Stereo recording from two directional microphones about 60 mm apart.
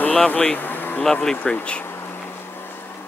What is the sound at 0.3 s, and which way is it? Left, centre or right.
Speech, left.